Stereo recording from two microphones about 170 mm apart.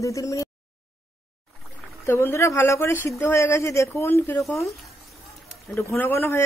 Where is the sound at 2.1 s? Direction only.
15° left (ahead or behind).